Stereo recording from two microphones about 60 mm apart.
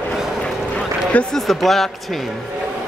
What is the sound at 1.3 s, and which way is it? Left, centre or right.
Speech, centre.